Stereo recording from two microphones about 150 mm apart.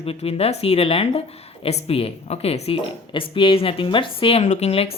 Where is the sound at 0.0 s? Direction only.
40° left (ahead or behind).